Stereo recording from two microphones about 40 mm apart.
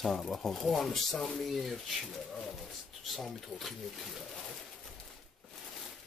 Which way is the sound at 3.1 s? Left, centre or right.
Centre.